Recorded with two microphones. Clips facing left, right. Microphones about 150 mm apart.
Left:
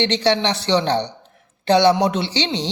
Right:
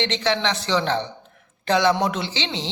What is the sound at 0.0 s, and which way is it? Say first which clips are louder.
A man's voice: left 4 dB; 35° left (ahead or behind).